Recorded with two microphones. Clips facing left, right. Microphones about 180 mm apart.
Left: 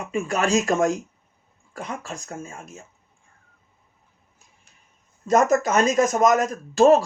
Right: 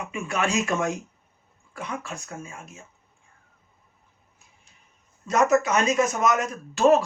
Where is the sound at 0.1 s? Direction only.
40° left (ahead or behind).